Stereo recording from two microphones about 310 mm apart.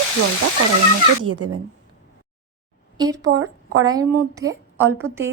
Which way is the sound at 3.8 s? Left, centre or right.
Centre.